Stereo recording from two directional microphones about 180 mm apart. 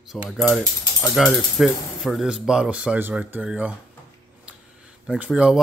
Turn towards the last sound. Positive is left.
turn(degrees=-5)  # may be behind; listen again after turning